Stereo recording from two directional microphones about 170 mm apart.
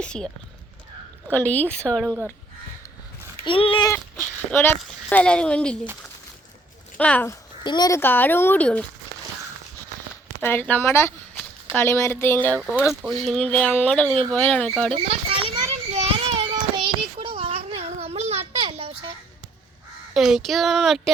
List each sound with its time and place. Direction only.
0.0 s speech: 5° left (ahead or behind)
1.3 s speech: 10° left (ahead or behind)
3.4 s speech: 30° left (ahead or behind)
4.5 s speech: 10° left (ahead or behind)
6.9 s speech: 10° left (ahead or behind)
7.6 s speech: 25° left (ahead or behind); by 8.8 s 10° left (ahead or behind)
10.4 s speech: 10° left (ahead or behind)
12.8 s speech: centre (ahead or behind)
14.9 s children playing: 35° right (ahead or behind)
20.1 s speech: centre (ahead or behind)